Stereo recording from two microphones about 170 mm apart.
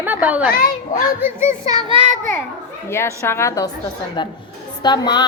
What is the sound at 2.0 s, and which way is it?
Speech, 45° right (ahead or behind).